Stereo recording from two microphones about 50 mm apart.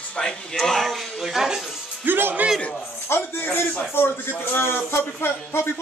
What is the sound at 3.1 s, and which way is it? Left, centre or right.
A man's voice, left.